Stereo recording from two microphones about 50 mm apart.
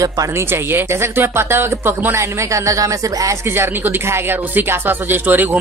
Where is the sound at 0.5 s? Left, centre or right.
Right.